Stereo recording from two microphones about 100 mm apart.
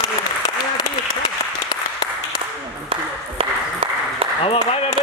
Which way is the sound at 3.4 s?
65° right (ahead or behind).